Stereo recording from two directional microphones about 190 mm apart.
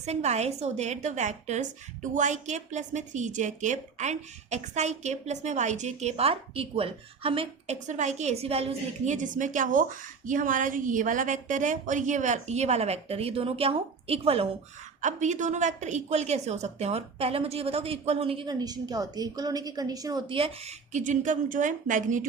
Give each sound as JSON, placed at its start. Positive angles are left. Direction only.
{"t": 0.0, "sound": "a woman's voice", "side_deg": -35}